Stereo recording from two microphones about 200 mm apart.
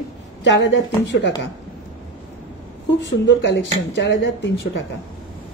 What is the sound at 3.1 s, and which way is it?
Speech, 65° left (ahead or behind).